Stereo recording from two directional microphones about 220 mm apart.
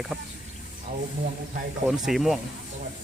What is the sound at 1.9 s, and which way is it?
Speech, centre (ahead or behind).